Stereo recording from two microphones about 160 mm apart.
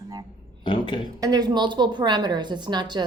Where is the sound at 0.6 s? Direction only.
30° left (ahead or behind).